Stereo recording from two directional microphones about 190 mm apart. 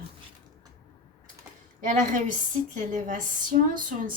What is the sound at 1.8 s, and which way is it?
A woman's voice, 40° right (ahead or behind).